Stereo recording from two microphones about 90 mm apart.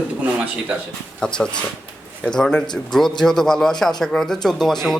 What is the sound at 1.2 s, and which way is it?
Speech, 10° left (ahead or behind).